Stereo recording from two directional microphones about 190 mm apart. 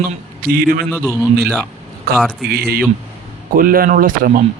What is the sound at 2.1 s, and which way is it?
Speech, 55° right (ahead or behind).